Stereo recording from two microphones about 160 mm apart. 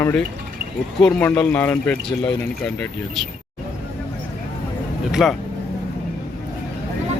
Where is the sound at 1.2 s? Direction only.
10° left (ahead or behind).